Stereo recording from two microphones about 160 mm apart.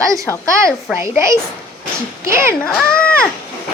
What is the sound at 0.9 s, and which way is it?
A child's voice, 15° right (ahead or behind).